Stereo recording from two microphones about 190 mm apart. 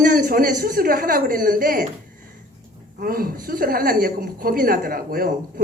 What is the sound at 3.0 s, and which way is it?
A woman's voice, 50° right (ahead or behind).